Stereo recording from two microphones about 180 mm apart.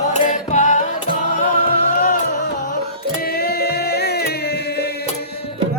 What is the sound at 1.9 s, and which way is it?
Music, 50° left (ahead or behind).